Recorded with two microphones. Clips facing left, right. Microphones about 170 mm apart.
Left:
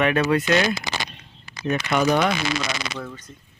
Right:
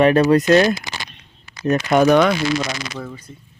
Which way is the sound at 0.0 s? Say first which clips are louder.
Right 7 dB; 35° right (ahead or behind).